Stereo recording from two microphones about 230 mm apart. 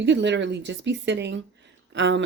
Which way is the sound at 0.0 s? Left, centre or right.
Right.